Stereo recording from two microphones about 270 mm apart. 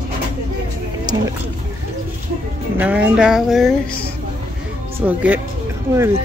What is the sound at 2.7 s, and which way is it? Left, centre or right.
Speech, centre.